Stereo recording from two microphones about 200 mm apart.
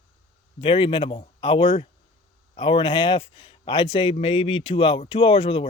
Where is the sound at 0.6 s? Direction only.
25° left (ahead or behind).